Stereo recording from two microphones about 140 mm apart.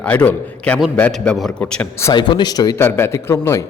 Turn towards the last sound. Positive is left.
turn(degrees=20)  # may be behind; listen again after turning